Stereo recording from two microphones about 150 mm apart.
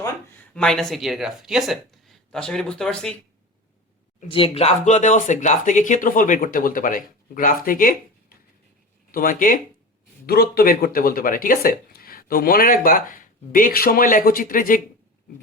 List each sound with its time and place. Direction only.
0.5 s speech: 5° left (ahead or behind)
4.3 s speech: 35° left (ahead or behind); by 9.6 s 65° left (ahead or behind)
10.2 s speech: 90° left; by 14.8 s 65° left (ahead or behind)